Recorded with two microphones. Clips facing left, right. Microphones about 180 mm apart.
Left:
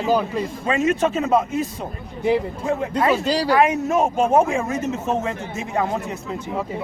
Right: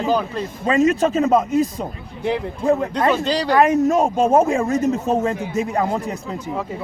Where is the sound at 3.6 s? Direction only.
40° right (ahead or behind).